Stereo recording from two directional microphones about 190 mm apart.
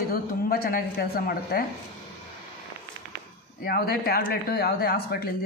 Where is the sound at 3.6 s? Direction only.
50° left (ahead or behind).